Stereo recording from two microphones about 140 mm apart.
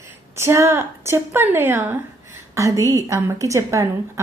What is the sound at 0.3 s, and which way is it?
A woman's voice, 20° right (ahead or behind).